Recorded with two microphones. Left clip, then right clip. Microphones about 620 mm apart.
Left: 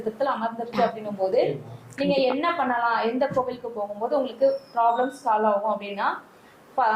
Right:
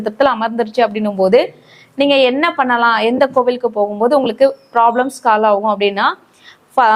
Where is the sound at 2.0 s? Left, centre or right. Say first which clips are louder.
Right 11 dB; right.